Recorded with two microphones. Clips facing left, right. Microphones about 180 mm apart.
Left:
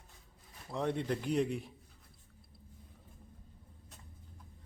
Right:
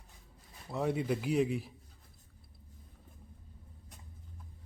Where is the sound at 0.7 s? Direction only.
5° right (ahead or behind).